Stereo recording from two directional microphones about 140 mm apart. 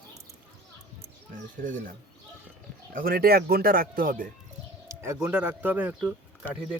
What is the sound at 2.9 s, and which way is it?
Speech, 90° right.